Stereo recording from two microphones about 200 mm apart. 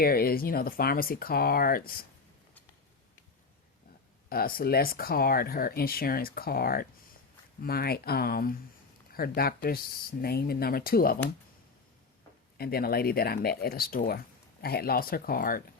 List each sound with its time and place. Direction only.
0.0 s speech: 50° left (ahead or behind)
4.3 s speech: 50° left (ahead or behind)
12.5 s speech: 50° left (ahead or behind)